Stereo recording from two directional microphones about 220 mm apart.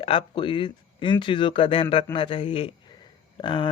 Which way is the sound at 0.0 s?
25° left (ahead or behind).